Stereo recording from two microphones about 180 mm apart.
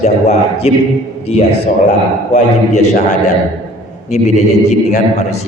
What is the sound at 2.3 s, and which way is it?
Speech, 40° left (ahead or behind).